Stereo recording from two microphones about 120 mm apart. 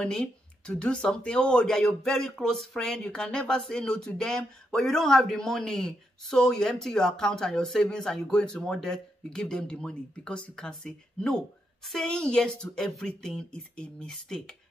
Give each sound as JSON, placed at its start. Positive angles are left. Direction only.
{"t": 0.0, "sound": "speech", "side_deg": 5}